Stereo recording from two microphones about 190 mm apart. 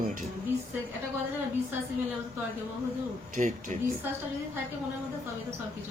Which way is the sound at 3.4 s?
40° right (ahead or behind).